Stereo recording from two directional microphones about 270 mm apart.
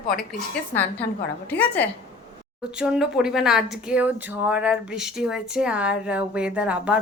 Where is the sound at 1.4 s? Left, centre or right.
Centre.